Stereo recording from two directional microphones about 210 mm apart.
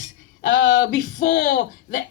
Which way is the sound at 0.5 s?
65° left (ahead or behind).